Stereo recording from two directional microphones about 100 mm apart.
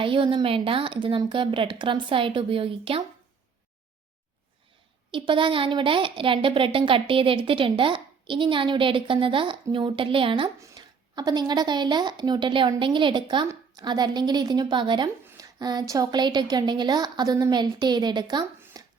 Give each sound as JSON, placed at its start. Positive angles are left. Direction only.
{"t": 0.0, "sound": "a woman's voice", "side_deg": -60}
{"t": 5.1, "sound": "a woman's voice", "side_deg": -55}
{"t": 10.6, "sound": "speech", "side_deg": -40}
{"t": 18.8, "sound": "a sound", "side_deg": -40}